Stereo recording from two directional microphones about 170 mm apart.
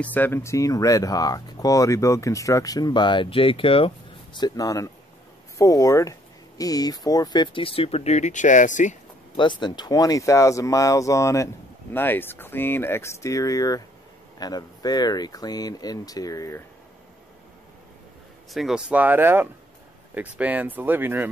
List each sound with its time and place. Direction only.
0.0 s speech: 10° left (ahead or behind); by 8.9 s 45° left (ahead or behind)
9.4 s speech: 25° left (ahead or behind)
18.5 s speech: centre (ahead or behind)